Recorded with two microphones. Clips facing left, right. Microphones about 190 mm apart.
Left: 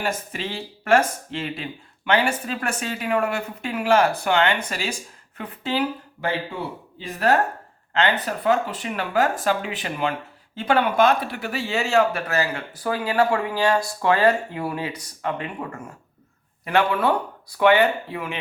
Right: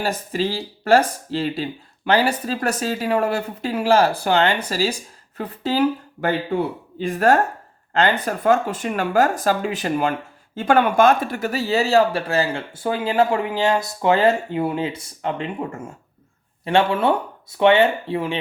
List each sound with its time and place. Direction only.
0.0 s speech: 35° right (ahead or behind)
7.0 s speech: 50° right (ahead or behind); by 18.3 s 30° right (ahead or behind)